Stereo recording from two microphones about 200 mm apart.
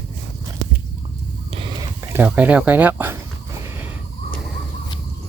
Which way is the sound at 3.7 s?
10° right (ahead or behind).